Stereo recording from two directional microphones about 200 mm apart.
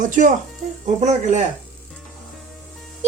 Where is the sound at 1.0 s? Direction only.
35° right (ahead or behind).